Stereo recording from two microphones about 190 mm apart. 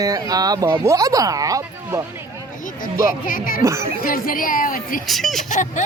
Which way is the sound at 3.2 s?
45° left (ahead or behind).